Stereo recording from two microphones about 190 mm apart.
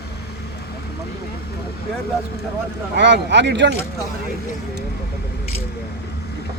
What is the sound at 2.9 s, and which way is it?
Speech, 65° right (ahead or behind).